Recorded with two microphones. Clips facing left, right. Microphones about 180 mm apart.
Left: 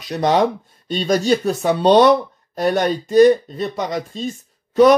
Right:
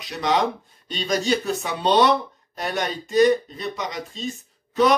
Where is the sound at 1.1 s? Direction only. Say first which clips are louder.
Left 5 dB; 40° left (ahead or behind).